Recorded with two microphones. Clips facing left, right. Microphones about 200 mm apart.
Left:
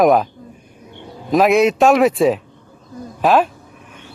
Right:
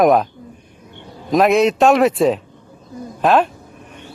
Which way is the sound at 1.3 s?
Centre (ahead or behind).